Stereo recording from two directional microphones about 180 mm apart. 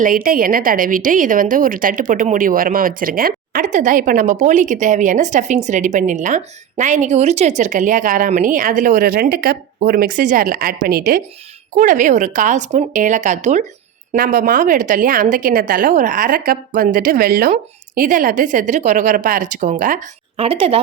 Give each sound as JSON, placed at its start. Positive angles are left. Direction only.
{"t": 0.0, "sound": "a woman's voice", "side_deg": -50}
{"t": 11.7, "sound": "a woman's voice", "side_deg": -45}
{"t": 20.3, "sound": "a woman's voice", "side_deg": -35}